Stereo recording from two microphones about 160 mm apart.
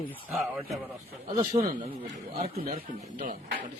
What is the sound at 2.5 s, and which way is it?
Speech, 65° right (ahead or behind).